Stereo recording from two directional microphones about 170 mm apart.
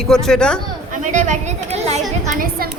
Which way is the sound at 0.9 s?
50° right (ahead or behind).